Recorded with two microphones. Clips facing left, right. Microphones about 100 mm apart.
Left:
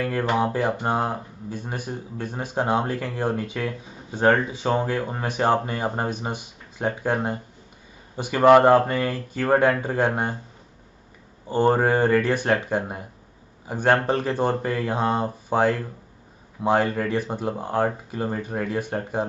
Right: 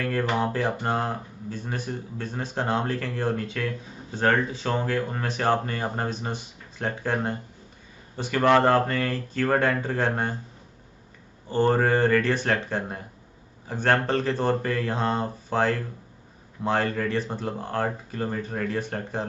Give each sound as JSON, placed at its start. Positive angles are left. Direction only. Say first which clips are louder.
{"t": 0.0, "sound": "speech", "louder": "left 2 dB", "side_deg": 20}
{"t": 11.4, "sound": "speech", "louder": "left 2 dB", "side_deg": 15}